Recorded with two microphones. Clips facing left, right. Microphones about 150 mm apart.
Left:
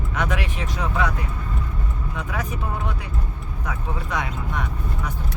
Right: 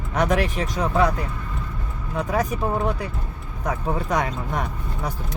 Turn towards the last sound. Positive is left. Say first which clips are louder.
# right 4 dB
turn(degrees=-40)  # may be behind; listen again after turning